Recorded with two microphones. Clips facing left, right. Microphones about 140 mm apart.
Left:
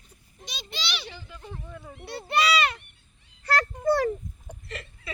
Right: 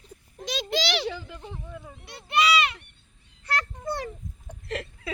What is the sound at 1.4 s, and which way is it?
Speech, 15° right (ahead or behind).